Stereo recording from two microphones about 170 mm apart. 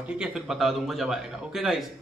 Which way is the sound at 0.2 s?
5° right (ahead or behind).